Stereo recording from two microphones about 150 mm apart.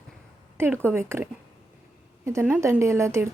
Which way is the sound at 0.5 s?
15° right (ahead or behind).